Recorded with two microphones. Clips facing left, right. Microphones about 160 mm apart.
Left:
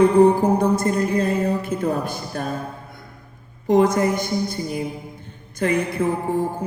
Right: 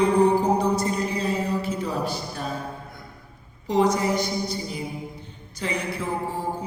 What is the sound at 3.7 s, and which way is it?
Mantra, 50° left (ahead or behind).